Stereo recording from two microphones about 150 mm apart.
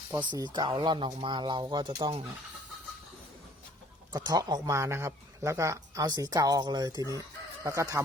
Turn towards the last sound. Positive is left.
turn(degrees=-20)  # may be behind; listen again after turning